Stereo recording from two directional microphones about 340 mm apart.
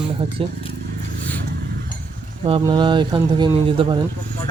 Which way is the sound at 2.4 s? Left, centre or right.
Centre.